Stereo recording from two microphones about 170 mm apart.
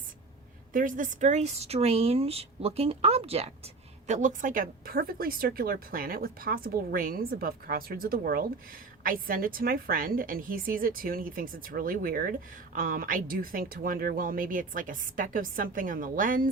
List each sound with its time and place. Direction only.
0.7 s a woman's voice: 50° right (ahead or behind)